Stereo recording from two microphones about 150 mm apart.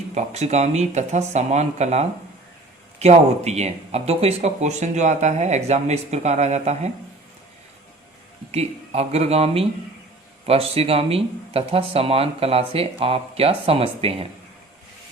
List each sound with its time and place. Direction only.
0.1 s speech: 50° right (ahead or behind)
8.5 s speech: 45° right (ahead or behind)